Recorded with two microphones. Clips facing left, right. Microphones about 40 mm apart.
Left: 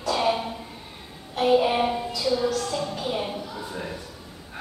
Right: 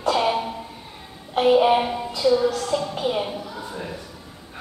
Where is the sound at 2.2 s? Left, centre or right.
Centre.